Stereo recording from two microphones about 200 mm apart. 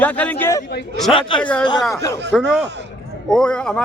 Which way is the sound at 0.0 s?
10° left (ahead or behind).